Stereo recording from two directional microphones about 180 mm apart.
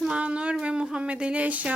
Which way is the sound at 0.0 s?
5° right (ahead or behind).